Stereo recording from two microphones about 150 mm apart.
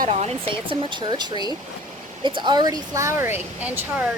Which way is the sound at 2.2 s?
30° right (ahead or behind).